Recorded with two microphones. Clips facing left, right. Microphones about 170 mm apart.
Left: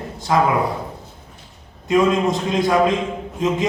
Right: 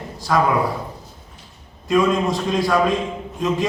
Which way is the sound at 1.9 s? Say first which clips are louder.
Left 1 dB; 20° left (ahead or behind).